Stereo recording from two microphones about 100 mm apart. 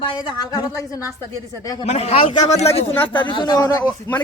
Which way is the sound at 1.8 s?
90° left.